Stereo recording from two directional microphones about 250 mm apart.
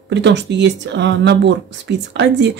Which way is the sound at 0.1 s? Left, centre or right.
Right.